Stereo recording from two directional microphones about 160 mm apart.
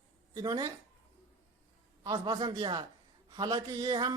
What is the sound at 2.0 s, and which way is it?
Speech, 25° right (ahead or behind).